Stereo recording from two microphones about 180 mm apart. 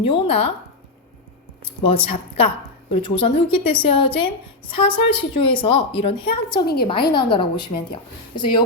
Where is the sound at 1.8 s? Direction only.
30° left (ahead or behind).